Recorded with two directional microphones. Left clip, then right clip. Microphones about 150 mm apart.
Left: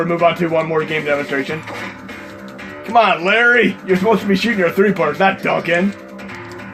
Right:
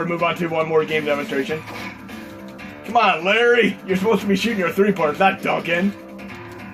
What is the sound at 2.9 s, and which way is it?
Speech, 55° left (ahead or behind).